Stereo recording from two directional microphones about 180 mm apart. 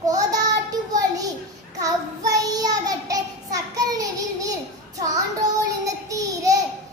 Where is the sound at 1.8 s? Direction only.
20° right (ahead or behind).